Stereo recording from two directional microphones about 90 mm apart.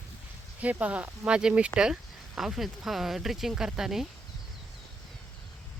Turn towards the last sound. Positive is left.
turn(degrees=-5)  # may be behind; listen again after turning